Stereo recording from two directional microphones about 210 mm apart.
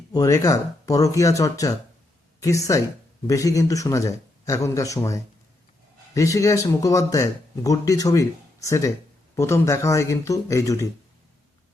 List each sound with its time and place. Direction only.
0.1 s speech: 15° left (ahead or behind)
3.2 s speech: 15° left (ahead or behind)